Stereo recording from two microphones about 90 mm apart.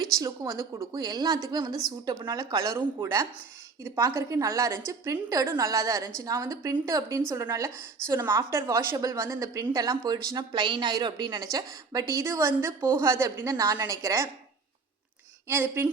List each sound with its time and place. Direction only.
0.2 s a woman's voice: 35° right (ahead or behind); by 11.4 s 55° right (ahead or behind)
11.5 s a woman's voice: 40° right (ahead or behind)
15.4 s speech: 25° right (ahead or behind)